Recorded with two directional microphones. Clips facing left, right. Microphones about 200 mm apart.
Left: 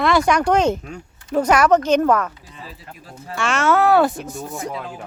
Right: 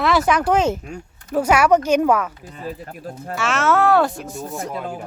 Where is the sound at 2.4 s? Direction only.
50° right (ahead or behind).